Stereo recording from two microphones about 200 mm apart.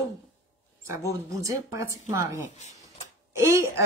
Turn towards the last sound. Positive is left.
turn(degrees=-15)  # may be behind; listen again after turning